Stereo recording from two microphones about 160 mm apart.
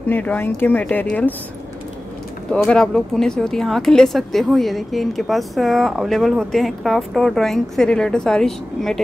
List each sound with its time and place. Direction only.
0.1 s speech: 10° left (ahead or behind)
2.5 s speech: 5° left (ahead or behind)